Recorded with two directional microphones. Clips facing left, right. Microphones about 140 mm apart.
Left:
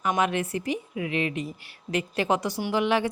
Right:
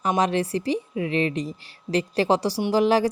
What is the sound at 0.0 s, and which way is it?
A woman's voice, 35° right (ahead or behind).